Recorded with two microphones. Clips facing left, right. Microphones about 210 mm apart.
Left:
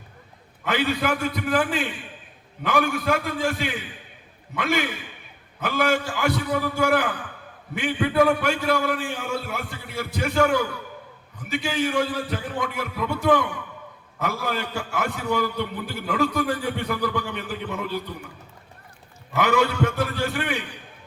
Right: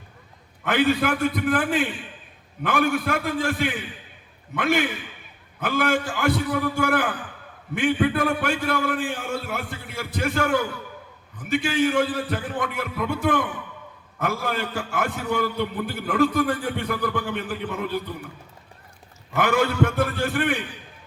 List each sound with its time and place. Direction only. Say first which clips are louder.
0.6 s a man's voice: right 3 dB; 55° right (ahead or behind)
19.4 s a man's voice: even; 50° right (ahead or behind)